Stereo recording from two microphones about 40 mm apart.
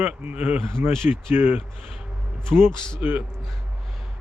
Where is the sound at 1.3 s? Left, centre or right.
Right.